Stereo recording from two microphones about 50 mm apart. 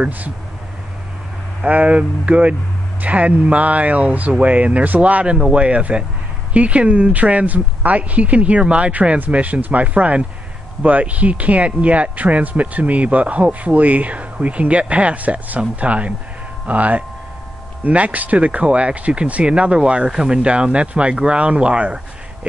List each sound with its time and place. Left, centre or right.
1.6 s speech: right